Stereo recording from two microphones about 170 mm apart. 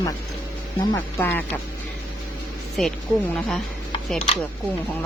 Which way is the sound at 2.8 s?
5° left (ahead or behind).